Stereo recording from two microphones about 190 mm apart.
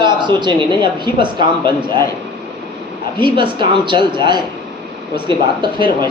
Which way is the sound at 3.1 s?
25° right (ahead or behind).